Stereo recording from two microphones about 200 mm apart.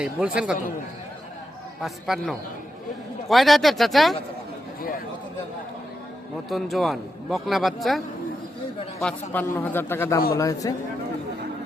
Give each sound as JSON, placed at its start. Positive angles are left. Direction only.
{"t": 0.0, "sound": "a man's voice", "side_deg": -5}
{"t": 1.8, "sound": "a man's voice", "side_deg": 0}
{"t": 6.5, "sound": "a man's voice", "side_deg": 0}
{"t": 9.3, "sound": "a man's voice", "side_deg": 10}